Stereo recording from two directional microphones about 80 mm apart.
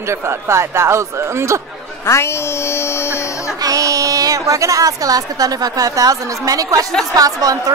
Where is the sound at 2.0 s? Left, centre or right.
Left.